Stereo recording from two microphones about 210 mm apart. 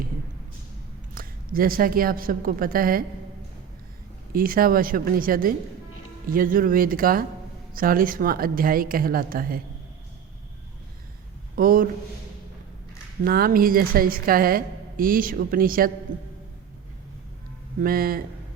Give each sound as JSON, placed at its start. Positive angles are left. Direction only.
{"t": 1.1, "sound": "a woman's voice", "side_deg": -40}
{"t": 4.3, "sound": "a woman's voice", "side_deg": -45}
{"t": 11.5, "sound": "a man's voice", "side_deg": -40}
{"t": 13.2, "sound": "a woman's voice", "side_deg": -45}
{"t": 17.7, "sound": "a woman's voice", "side_deg": -45}